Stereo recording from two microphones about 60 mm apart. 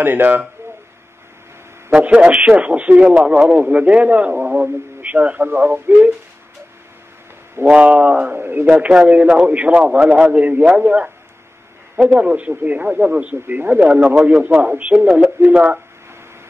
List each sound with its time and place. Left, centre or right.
0.0 s speech: right
2.0 s speech: right
7.7 s speech: right
8.9 s speech: right
12.1 s speech: right